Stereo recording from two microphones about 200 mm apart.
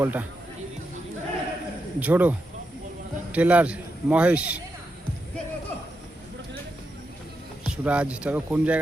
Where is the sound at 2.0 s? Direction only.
10° right (ahead or behind).